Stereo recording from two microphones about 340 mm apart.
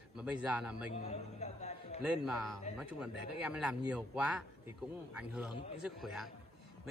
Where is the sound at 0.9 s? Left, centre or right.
Centre.